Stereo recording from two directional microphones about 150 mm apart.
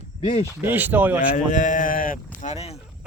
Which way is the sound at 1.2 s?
65° left (ahead or behind).